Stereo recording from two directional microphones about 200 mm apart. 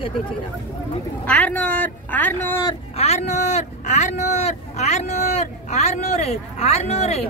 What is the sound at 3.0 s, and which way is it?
Speech, 35° left (ahead or behind).